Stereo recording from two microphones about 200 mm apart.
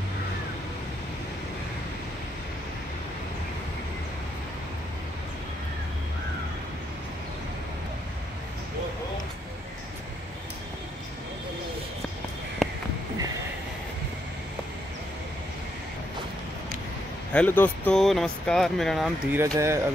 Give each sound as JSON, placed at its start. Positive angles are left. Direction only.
{"t": 12.6, "sound": "a sound", "side_deg": 0}
{"t": 17.3, "sound": "speech", "side_deg": 10}
{"t": 19.3, "sound": "speech", "side_deg": -15}